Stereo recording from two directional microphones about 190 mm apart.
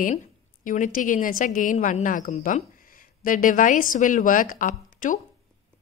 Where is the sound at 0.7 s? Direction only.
45° left (ahead or behind).